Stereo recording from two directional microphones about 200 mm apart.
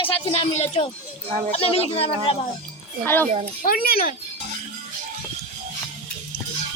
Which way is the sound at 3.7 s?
45° left (ahead or behind).